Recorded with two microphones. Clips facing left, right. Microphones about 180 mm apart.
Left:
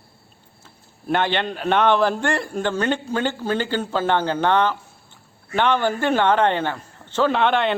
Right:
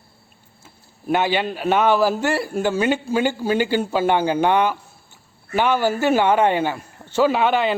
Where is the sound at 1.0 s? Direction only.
5° right (ahead or behind).